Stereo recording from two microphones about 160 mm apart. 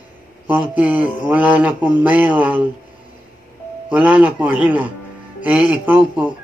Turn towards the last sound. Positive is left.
turn(degrees=-10)  # may be behind; listen again after turning